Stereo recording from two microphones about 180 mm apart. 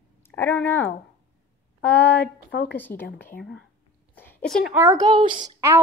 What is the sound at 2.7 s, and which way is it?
Speech, 10° left (ahead or behind).